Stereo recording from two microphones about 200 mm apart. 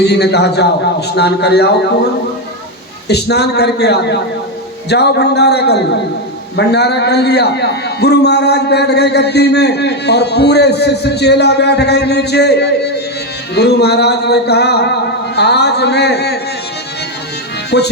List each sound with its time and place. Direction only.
0.0 s a man's voice: 55° left (ahead or behind)
3.1 s a man's voice: 55° left (ahead or behind)
17.7 s a man's voice: 55° left (ahead or behind)